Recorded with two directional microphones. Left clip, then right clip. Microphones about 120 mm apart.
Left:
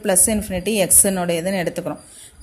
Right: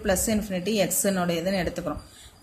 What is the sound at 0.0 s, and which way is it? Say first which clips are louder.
A woman's voice: left 5 dB; 50° left (ahead or behind).